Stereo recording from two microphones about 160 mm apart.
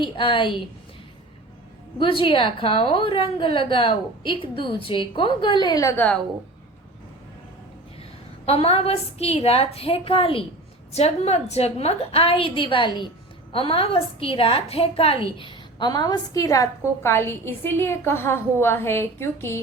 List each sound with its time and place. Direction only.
0.0 s a woman's voice: 30° left (ahead or behind)
2.0 s a woman's voice: 35° left (ahead or behind)
8.4 s a woman's voice: 40° left (ahead or behind); by 19.5 s 15° left (ahead or behind)